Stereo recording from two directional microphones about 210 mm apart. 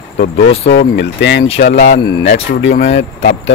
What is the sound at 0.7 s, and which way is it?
Speech, 55° left (ahead or behind).